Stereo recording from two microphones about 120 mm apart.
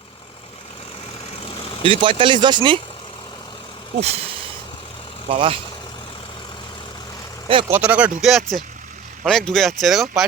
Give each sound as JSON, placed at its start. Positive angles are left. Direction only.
{"t": 1.8, "sound": "speech", "side_deg": -45}
{"t": 4.0, "sound": "speech", "side_deg": -60}
{"t": 5.3, "sound": "speech", "side_deg": -45}
{"t": 7.7, "sound": "speech", "side_deg": -10}